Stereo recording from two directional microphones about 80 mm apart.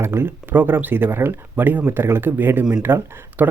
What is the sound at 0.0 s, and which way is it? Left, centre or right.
Speech, right.